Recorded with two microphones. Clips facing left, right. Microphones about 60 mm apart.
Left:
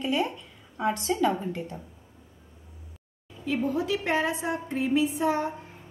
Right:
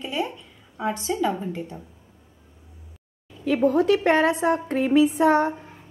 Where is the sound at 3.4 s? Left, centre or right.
Right.